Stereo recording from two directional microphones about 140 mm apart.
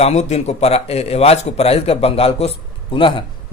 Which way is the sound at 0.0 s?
50° left (ahead or behind).